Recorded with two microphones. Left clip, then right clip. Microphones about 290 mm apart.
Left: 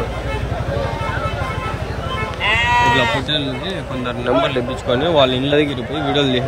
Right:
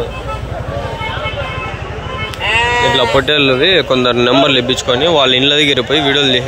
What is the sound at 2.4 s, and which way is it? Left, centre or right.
Sheep, right.